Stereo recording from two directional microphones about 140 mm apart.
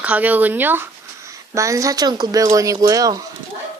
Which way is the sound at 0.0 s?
10° right (ahead or behind).